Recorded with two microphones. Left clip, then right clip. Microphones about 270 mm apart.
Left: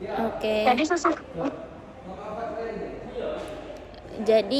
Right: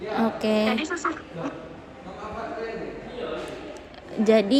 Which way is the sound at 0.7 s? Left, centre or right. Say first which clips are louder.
Left 5 dB; centre.